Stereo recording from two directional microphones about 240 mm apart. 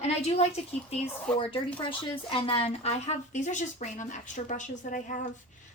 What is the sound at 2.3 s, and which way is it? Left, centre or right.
A woman's voice, left.